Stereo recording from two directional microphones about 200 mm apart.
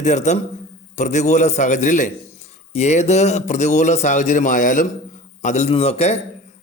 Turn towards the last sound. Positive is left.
turn(degrees=30)  # may be behind; listen again after turning